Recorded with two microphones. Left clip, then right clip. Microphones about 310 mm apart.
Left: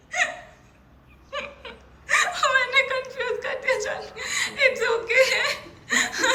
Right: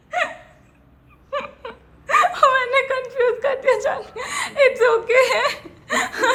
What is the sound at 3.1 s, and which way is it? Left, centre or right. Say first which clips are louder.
Chuckle: right 8 dB; centre.